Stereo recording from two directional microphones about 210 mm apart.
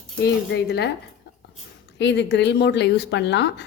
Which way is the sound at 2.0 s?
55° left (ahead or behind).